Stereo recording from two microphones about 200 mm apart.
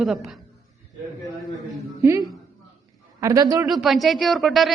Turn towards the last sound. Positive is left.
turn(degrees=0)  # may be behind; listen again after turning